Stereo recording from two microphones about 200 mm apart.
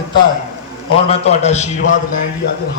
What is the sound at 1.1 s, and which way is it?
Speech, 35° left (ahead or behind).